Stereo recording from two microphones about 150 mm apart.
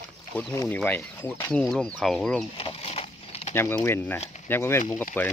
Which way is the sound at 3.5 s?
15° left (ahead or behind).